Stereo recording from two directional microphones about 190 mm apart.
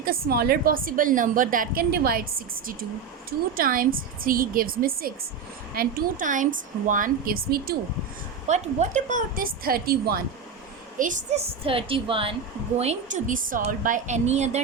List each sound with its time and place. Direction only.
0.0 s a woman's voice: 50° right (ahead or behind)
3.2 s a woman's voice: 50° right (ahead or behind)
8.4 s a woman's voice: 35° right (ahead or behind); by 10.2 s 55° right (ahead or behind)
10.9 s a woman's voice: 40° right (ahead or behind)